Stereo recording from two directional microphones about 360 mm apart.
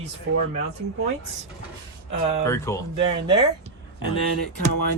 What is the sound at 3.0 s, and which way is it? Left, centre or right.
Speech, centre.